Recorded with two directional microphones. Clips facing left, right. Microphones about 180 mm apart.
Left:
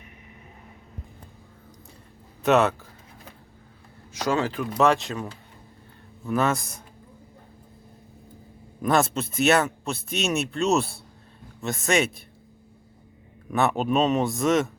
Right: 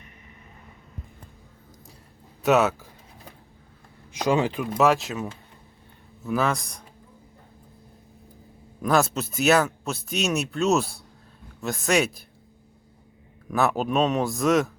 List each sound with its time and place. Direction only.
2.4 s speech: centre (ahead or behind)
4.1 s speech: 15° right (ahead or behind)
4.8 s speech: 5° right (ahead or behind)
8.8 s speech: centre (ahead or behind)
13.5 s speech: centre (ahead or behind)